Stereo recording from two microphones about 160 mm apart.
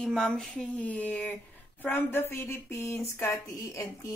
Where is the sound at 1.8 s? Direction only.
15° left (ahead or behind).